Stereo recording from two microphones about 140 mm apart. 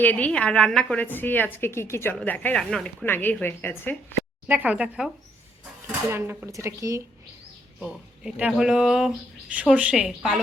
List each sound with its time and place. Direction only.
0.0 s a woman's voice: 10° left (ahead or behind)
4.4 s speech: 10° right (ahead or behind)
7.8 s speech: 5° right (ahead or behind)